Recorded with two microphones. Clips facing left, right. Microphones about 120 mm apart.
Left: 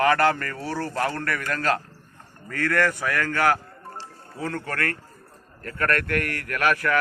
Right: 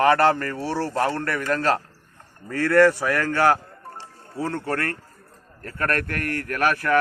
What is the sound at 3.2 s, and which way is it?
A man's voice, 30° right (ahead or behind).